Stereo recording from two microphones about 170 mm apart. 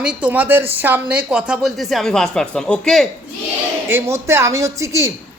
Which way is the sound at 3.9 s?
15° right (ahead or behind).